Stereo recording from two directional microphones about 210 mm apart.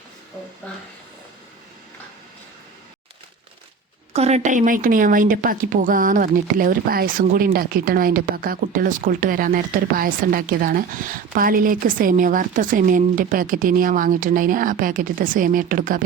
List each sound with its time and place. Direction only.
4.1 s speech: 30° right (ahead or behind)